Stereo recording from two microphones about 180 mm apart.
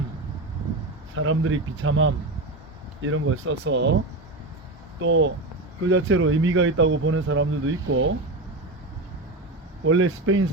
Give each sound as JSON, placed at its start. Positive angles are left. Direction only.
{"t": 1.1, "sound": "speech", "side_deg": -90}
{"t": 4.9, "sound": "speech", "side_deg": -90}
{"t": 9.8, "sound": "speech", "side_deg": -90}